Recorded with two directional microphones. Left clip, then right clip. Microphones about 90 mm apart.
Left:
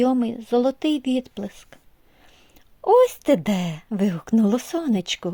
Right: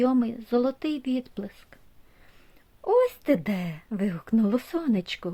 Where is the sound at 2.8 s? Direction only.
55° left (ahead or behind).